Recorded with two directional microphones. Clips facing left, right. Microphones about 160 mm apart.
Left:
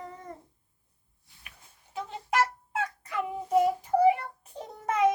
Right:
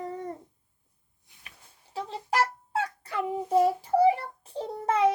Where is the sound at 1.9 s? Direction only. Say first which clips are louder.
Even; 35° right (ahead or behind).